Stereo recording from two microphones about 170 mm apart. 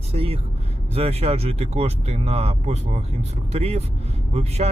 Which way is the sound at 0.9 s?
35° right (ahead or behind).